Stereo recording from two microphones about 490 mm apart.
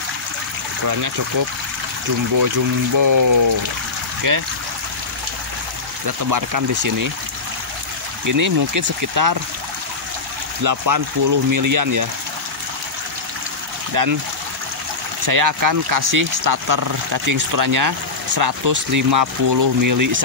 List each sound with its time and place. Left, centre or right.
3.0 s speech: right
6.0 s speech: right
8.3 s speech: right
10.6 s speech: right
14.0 s speech: right
15.2 s speech: right